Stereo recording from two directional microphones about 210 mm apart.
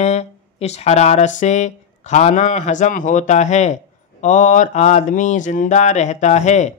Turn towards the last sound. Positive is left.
turn(degrees=35)  # may be behind; listen again after turning